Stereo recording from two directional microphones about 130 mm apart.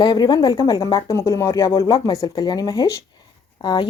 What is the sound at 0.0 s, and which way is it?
Speech, 35° left (ahead or behind).